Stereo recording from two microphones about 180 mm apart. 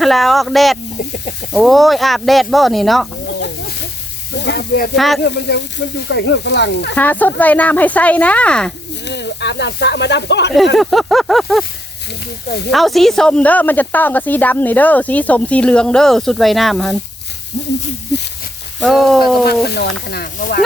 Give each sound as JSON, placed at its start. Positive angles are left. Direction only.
{"t": 0.0, "sound": "speech", "side_deg": 0}
{"t": 3.2, "sound": "snake", "side_deg": 75}
{"t": 4.4, "sound": "speech", "side_deg": 70}
{"t": 4.9, "sound": "speech", "side_deg": 0}
{"t": 5.2, "sound": "speech", "side_deg": 65}
{"t": 6.9, "sound": "speech", "side_deg": 10}
{"t": 9.0, "sound": "speech", "side_deg": 75}
{"t": 10.8, "sound": "speech", "side_deg": 0}
{"t": 12.7, "sound": "speech", "side_deg": 0}
{"t": 18.8, "sound": "speech", "side_deg": 0}
{"t": 19.6, "sound": "speech", "side_deg": 65}